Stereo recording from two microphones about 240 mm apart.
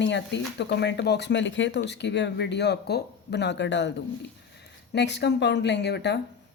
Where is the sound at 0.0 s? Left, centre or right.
Left.